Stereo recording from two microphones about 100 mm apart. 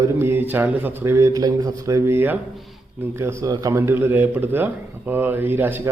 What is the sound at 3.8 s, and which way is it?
A man's voice, 25° right (ahead or behind).